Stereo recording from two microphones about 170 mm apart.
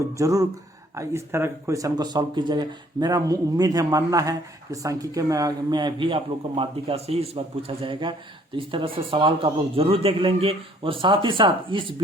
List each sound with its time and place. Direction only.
0.2 s a man's voice: 20° right (ahead or behind)